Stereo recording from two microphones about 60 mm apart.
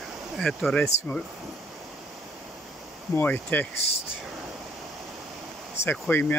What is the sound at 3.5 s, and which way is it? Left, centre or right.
Speech, left.